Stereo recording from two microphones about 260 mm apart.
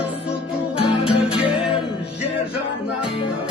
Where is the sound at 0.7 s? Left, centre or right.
Left.